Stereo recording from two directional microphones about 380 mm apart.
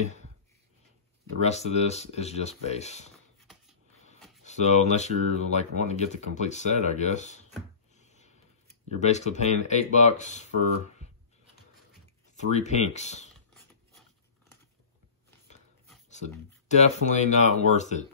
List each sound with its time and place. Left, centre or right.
1.4 s speech: centre
4.5 s speech: centre
7.9 s a sound: centre
9.0 s speech: centre
12.5 s speech: centre
16.1 s speech: centre